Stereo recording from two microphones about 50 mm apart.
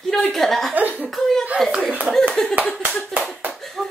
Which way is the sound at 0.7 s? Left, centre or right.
Right.